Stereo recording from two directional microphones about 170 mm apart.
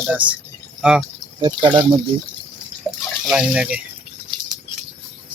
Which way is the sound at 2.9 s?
5° right (ahead or behind).